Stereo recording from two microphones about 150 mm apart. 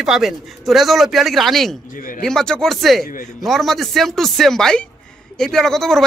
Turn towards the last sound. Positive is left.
turn(degrees=5)  # may be behind; listen again after turning